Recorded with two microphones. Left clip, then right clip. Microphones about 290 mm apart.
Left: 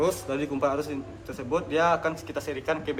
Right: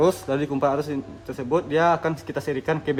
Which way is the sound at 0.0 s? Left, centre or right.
Right.